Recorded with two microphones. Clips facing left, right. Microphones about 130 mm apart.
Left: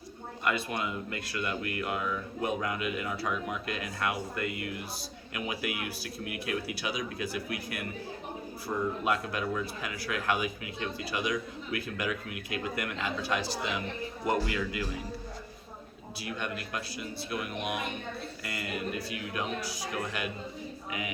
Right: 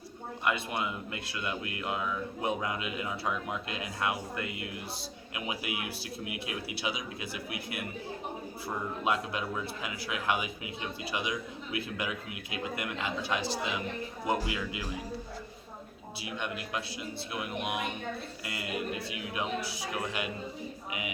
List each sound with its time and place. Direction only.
0.4 s a man's voice: 15° right (ahead or behind)
9.0 s a man's voice: 20° right (ahead or behind)
16.2 s a man's voice: 15° right (ahead or behind)